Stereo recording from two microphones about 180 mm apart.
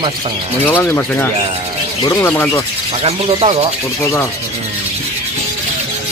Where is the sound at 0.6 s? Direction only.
10° left (ahead or behind).